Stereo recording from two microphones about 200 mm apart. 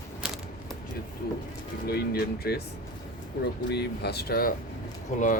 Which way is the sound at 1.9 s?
50° left (ahead or behind).